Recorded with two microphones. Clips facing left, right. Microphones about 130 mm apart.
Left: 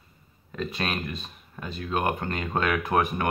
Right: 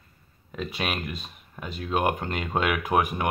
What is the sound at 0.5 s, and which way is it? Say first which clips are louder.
Speech: even; 10° right (ahead or behind).